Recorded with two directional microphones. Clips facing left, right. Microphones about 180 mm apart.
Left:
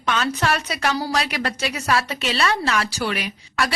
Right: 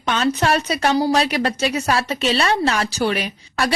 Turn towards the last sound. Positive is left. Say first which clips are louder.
# right 2 dB
turn(degrees=-30)  # may be behind; listen again after turning